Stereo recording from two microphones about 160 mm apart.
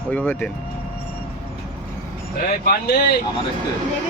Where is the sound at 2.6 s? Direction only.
75° left (ahead or behind).